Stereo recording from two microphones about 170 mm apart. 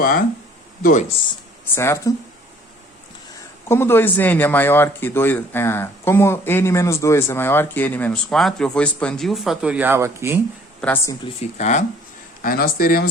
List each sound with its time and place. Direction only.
0.8 s speech: 50° left (ahead or behind)
1.7 s speech: 15° left (ahead or behind)
3.7 s speech: 15° left (ahead or behind); by 10.4 s 15° right (ahead or behind)
10.8 s a woman's voice: 10° left (ahead or behind)
11.5 s speech: 45° left (ahead or behind)
12.4 s speech: 60° left (ahead or behind)